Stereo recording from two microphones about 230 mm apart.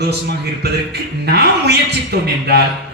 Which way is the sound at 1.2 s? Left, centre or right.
Right.